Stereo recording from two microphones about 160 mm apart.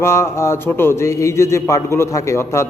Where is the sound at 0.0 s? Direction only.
15° left (ahead or behind).